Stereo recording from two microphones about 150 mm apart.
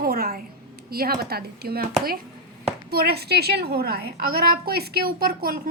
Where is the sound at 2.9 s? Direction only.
90° right.